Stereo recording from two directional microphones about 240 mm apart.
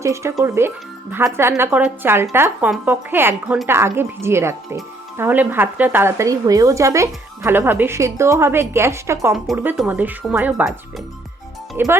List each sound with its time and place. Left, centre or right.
0.0 s speech: centre